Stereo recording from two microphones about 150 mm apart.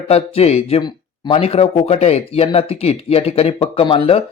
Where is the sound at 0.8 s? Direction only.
35° left (ahead or behind).